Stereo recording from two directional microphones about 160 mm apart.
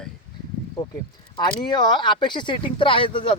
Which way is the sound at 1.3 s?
25° left (ahead or behind).